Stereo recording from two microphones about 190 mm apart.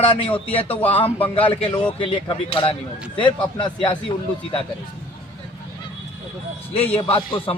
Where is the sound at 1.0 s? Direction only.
10° left (ahead or behind).